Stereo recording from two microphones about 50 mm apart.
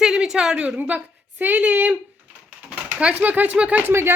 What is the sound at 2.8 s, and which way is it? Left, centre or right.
Pigeon, right.